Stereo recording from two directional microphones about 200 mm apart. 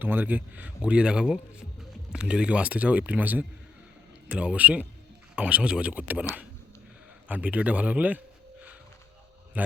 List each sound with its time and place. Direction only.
0.0 s speech: 10° right (ahead or behind)
7.3 s speech: 5° right (ahead or behind)
9.5 s a sound: 10° right (ahead or behind)